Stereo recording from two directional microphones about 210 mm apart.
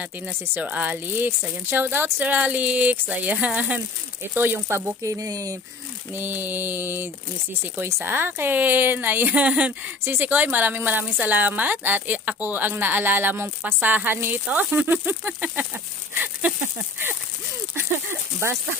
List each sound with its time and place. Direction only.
0.0 s a woman's voice: 10° right (ahead or behind)